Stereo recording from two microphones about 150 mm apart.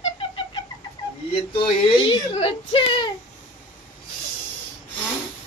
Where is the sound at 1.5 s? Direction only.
35° left (ahead or behind).